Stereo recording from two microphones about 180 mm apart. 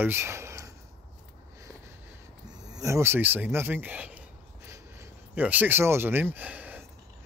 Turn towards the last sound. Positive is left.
turn(degrees=-10)  # may be behind; listen again after turning